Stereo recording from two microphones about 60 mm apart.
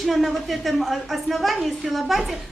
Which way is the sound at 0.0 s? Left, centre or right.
Centre.